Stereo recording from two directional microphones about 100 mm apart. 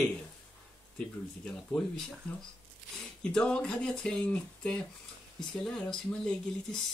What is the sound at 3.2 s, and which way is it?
Speech, 10° left (ahead or behind).